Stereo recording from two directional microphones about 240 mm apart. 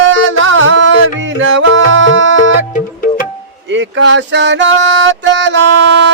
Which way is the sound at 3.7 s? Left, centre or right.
Right.